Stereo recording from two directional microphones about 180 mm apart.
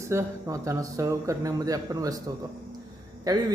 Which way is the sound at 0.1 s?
15° right (ahead or behind).